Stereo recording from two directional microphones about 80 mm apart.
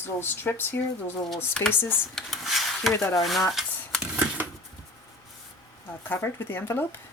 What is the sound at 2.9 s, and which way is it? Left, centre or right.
Speech, left.